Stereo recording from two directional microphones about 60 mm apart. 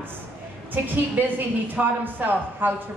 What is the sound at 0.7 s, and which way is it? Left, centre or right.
A woman's voice, right.